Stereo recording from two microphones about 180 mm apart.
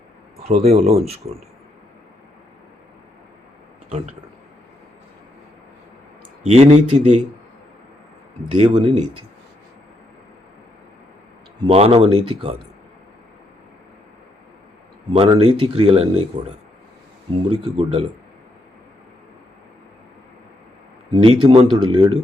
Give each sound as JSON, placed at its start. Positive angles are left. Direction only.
{"t": 0.4, "sound": "speech", "side_deg": -35}
{"t": 3.8, "sound": "speech", "side_deg": -40}
{"t": 6.4, "sound": "speech", "side_deg": -35}
{"t": 8.8, "sound": "speech", "side_deg": -35}
{"t": 11.6, "sound": "speech", "side_deg": -30}
{"t": 15.1, "sound": "speech", "side_deg": -30}
{"t": 17.5, "sound": "speech", "side_deg": -30}
{"t": 21.1, "sound": "speech", "side_deg": -30}